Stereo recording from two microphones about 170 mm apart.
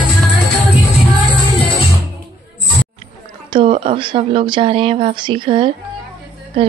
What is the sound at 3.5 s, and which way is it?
A woman's voice, 30° right (ahead or behind).